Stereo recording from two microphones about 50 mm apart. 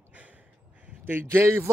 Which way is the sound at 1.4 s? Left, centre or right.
Right.